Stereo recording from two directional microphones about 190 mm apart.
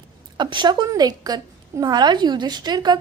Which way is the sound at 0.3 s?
25° right (ahead or behind).